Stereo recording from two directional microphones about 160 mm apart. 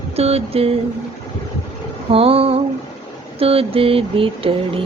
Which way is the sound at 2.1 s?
35° right (ahead or behind).